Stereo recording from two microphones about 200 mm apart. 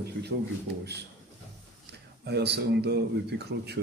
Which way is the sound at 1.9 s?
55° right (ahead or behind).